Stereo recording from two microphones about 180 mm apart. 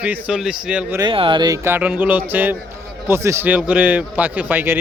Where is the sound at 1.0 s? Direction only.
30° right (ahead or behind).